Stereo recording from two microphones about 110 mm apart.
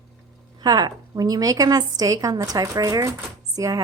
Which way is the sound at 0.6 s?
40° right (ahead or behind).